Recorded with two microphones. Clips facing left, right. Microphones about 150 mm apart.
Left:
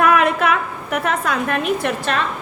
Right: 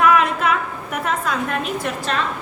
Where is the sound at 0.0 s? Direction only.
55° left (ahead or behind).